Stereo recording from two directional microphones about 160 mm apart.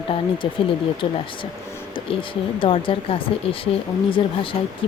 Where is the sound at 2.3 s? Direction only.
35° left (ahead or behind).